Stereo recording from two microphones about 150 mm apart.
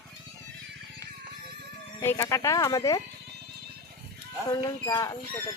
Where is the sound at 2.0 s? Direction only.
20° left (ahead or behind).